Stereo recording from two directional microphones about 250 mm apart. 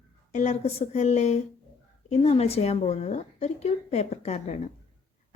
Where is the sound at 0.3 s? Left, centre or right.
Left.